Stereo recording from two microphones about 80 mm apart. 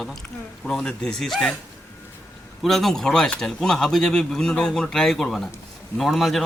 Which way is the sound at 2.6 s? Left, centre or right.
Centre.